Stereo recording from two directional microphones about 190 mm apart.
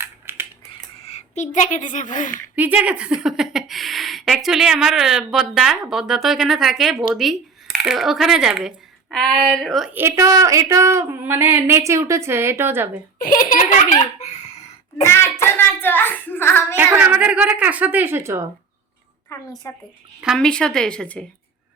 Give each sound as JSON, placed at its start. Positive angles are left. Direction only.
{"t": 0.0, "sound": "a sound", "side_deg": -10}
{"t": 1.0, "sound": "speech", "side_deg": 35}
{"t": 2.6, "sound": "speech", "side_deg": -10}
{"t": 9.9, "sound": "a woman's voice", "side_deg": -15}
{"t": 13.1, "sound": "a sound", "side_deg": 50}
{"t": 15.0, "sound": "a child's voice", "side_deg": 15}
{"t": 16.7, "sound": "a woman's voice", "side_deg": -10}
{"t": 19.3, "sound": "a woman's voice", "side_deg": 15}
{"t": 20.2, "sound": "speech", "side_deg": 0}